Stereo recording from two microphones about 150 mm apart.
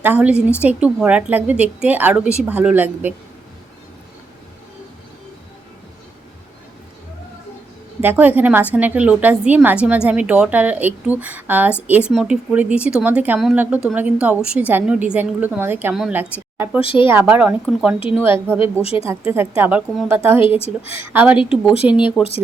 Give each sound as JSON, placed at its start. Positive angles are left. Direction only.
{"t": 0.0, "sound": "a woman's voice", "side_deg": -10}
{"t": 8.0, "sound": "a woman's voice", "side_deg": -10}
{"t": 16.8, "sound": "a woman's voice", "side_deg": 40}
{"t": 17.1, "sound": "a woman's voice", "side_deg": -15}
{"t": 18.1, "sound": "a woman's voice", "side_deg": -15}
{"t": 18.6, "sound": "a woman's voice", "side_deg": 40}
{"t": 19.0, "sound": "a woman's voice", "side_deg": -15}
{"t": 20.6, "sound": "a woman's voice", "side_deg": 40}
{"t": 21.1, "sound": "a woman's voice", "side_deg": -10}